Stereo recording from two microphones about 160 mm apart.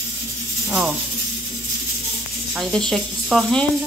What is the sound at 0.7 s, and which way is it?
Speech, 5° right (ahead or behind).